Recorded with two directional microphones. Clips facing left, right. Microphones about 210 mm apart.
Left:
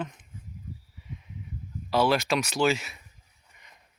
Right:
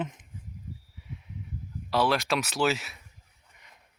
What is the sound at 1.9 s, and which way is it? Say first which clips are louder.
Speech: left 2 dB; centre (ahead or behind).